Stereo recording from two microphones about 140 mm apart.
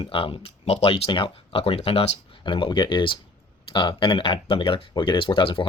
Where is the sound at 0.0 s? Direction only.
40° left (ahead or behind).